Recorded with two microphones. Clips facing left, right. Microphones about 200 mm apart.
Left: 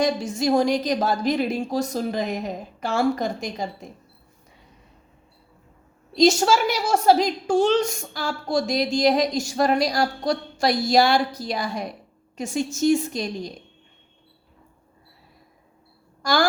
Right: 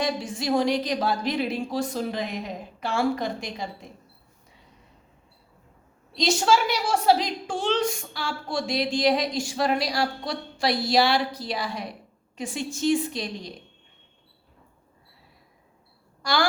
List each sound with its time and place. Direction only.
0.0 s a woman's voice: 45° left (ahead or behind)
6.1 s a woman's voice: 45° left (ahead or behind)
16.2 s a sound: 45° left (ahead or behind)